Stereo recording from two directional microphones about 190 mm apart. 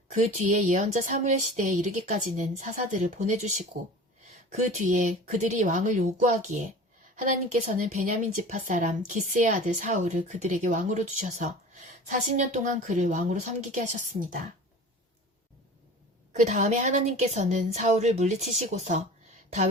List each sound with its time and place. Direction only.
0.1 s speech: 40° right (ahead or behind)
8.0 s speech: 40° right (ahead or behind)
16.3 s speech: 40° right (ahead or behind)